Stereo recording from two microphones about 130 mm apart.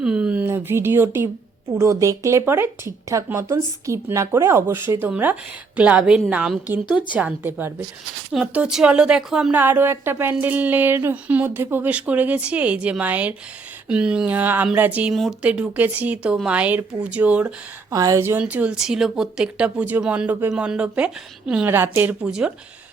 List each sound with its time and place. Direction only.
0.0 s a sound: 5° right (ahead or behind)
0.4 s speech: 20° right (ahead or behind)
15.1 s speech: centre (ahead or behind)
17.9 s speech: 25° right (ahead or behind); by 22.5 s 5° right (ahead or behind)